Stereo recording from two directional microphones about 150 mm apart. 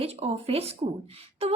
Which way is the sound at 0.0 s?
40° right (ahead or behind).